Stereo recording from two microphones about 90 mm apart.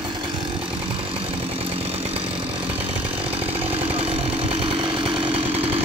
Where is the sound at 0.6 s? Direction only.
75° right (ahead or behind); by 5.8 s 90° right.